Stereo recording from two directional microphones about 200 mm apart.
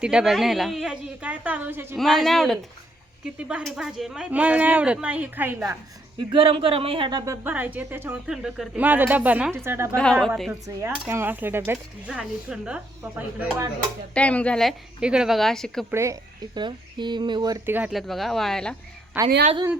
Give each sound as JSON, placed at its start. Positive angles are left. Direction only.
{"t": 0.0, "sound": "a woman's voice", "side_deg": -5}
{"t": 2.0, "sound": "a woman's voice", "side_deg": 0}
{"t": 6.3, "sound": "speech", "side_deg": -25}
{"t": 7.4, "sound": "speech", "side_deg": -10}
{"t": 9.9, "sound": "a woman's voice", "side_deg": 5}
{"t": 10.8, "sound": "speech", "side_deg": -10}
{"t": 14.1, "sound": "a woman's voice", "side_deg": 5}
{"t": 15.9, "sound": "speech", "side_deg": -15}
{"t": 19.1, "sound": "speech", "side_deg": -10}